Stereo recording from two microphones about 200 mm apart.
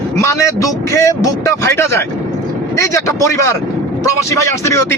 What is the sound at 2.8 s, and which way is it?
A man's voice, 15° left (ahead or behind).